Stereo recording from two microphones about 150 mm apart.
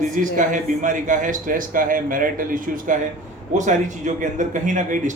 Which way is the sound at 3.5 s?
55° right (ahead or behind).